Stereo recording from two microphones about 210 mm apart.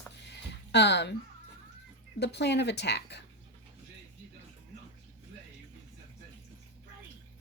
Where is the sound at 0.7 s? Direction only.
55° left (ahead or behind).